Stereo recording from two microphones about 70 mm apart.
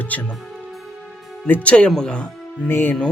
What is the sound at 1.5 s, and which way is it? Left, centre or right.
Speech, left.